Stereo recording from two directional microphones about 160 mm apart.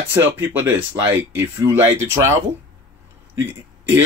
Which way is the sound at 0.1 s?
15° right (ahead or behind).